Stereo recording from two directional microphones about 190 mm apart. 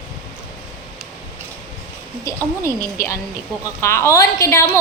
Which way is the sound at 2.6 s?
15° left (ahead or behind).